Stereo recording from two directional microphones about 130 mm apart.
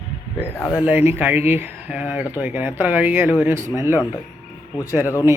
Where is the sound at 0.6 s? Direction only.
10° right (ahead or behind).